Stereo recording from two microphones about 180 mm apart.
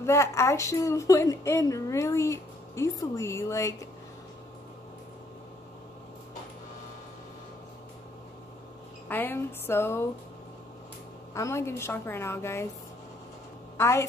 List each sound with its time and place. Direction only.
0.0 s a woman's voice: 15° left (ahead or behind)
9.1 s a woman's voice: 10° left (ahead or behind)
11.3 s a woman's voice: 15° left (ahead or behind)
13.7 s a woman's voice: 15° left (ahead or behind)